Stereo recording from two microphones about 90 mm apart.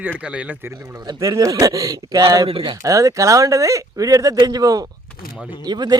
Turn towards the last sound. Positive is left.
turn(degrees=-50)  # may be behind; listen again after turning